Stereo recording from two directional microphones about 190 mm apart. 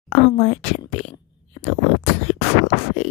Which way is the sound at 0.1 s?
30° left (ahead or behind).